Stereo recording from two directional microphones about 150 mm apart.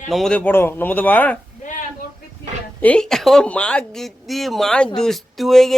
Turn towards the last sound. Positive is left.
turn(degrees=0)  # may be behind; listen again after turning